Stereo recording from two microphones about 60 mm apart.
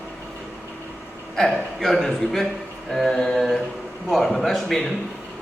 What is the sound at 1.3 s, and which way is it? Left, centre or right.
A man's voice, centre.